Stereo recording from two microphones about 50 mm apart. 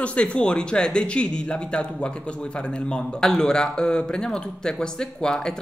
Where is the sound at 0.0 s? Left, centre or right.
Left.